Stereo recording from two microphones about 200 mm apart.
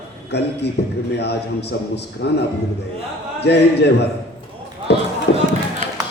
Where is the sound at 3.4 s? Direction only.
55° left (ahead or behind).